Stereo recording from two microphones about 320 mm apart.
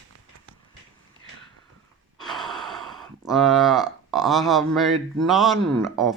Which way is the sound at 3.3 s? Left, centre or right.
Centre.